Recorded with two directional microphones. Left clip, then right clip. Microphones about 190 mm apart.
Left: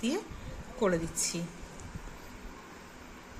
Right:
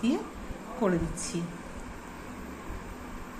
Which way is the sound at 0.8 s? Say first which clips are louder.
Even; 50° left (ahead or behind).